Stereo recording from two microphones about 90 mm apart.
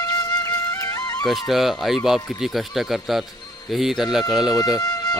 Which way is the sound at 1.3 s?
Centre (ahead or behind).